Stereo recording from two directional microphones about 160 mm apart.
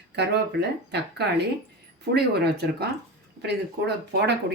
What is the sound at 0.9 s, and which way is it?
Speech, 90° right.